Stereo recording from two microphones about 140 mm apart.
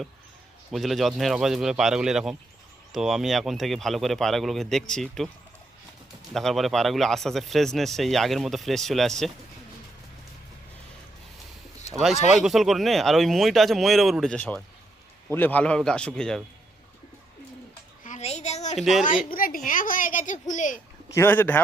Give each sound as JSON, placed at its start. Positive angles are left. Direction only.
{"t": 0.7, "sound": "speech", "side_deg": 0}
{"t": 6.3, "sound": "speech", "side_deg": 0}
{"t": 12.3, "sound": "a man's voice", "side_deg": 0}
{"t": 18.0, "sound": "a sound", "side_deg": 65}
{"t": 18.3, "sound": "a sound", "side_deg": 50}
{"t": 18.8, "sound": "speech", "side_deg": 0}
{"t": 19.4, "sound": "a woman's voice", "side_deg": 85}
{"t": 21.1, "sound": "a man's voice", "side_deg": 15}